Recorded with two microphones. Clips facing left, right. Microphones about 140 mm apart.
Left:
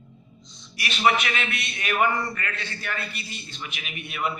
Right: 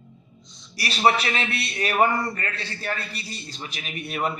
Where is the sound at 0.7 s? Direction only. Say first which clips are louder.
Right 2 dB; 35° right (ahead or behind).